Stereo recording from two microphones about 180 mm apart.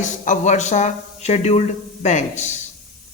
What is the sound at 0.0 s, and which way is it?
A man's voice, 40° left (ahead or behind).